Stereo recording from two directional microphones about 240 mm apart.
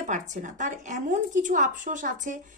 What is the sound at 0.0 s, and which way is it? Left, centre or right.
A woman's voice, right.